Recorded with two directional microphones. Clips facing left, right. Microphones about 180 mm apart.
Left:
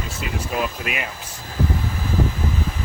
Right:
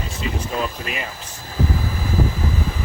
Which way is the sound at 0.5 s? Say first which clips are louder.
Even; 5° left (ahead or behind).